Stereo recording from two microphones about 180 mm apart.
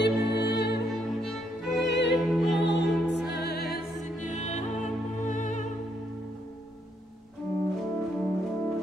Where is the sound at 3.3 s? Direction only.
65° left (ahead or behind).